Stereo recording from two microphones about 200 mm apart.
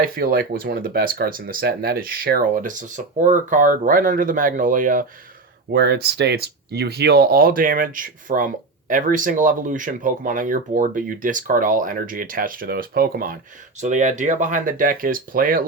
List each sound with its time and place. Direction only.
0.0 s speech: 45° right (ahead or behind)
5.7 s speech: 55° right (ahead or behind)
13.8 s speech: 35° right (ahead or behind)